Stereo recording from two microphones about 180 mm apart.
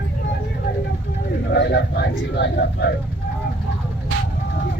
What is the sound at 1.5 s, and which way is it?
Speech, 70° left (ahead or behind).